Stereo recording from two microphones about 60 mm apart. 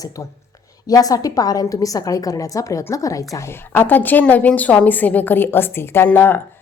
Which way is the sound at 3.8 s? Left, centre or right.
Left.